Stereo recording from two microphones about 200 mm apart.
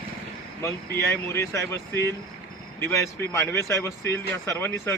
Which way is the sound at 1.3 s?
15° left (ahead or behind).